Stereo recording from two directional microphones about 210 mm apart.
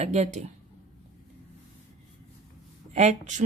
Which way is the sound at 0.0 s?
30° right (ahead or behind).